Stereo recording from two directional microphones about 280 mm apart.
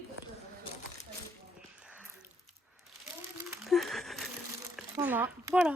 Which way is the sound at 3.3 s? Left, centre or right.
Centre.